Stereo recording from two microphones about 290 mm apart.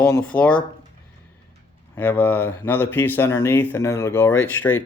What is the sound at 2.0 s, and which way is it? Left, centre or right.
Speech, centre.